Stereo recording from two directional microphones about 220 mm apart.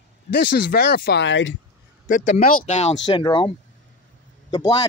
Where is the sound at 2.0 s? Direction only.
35° left (ahead or behind).